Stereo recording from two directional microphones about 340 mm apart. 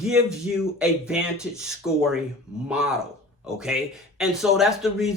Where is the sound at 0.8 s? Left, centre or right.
Centre.